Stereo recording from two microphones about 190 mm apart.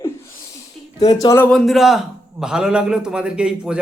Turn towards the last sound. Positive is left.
turn(degrees=-5)  # may be behind; listen again after turning